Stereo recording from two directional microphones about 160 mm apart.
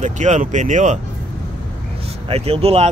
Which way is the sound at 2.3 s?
40° right (ahead or behind).